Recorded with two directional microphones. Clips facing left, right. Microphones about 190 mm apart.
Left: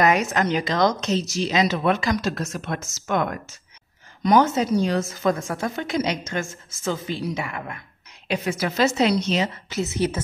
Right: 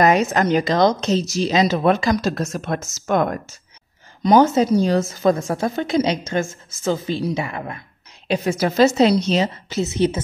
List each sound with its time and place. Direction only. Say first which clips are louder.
0.0 s a woman's voice: right 4 dB; 35° right (ahead or behind)
0.7 s a woman's voice: right 4 dB; 30° right (ahead or behind)